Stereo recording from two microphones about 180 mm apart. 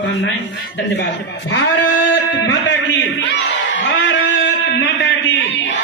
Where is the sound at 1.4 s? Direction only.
90° left.